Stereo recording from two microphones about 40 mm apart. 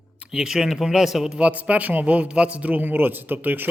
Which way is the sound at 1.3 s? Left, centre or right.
Right.